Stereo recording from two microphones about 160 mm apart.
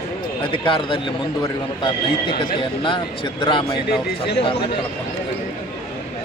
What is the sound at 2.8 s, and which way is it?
Speech, 30° left (ahead or behind).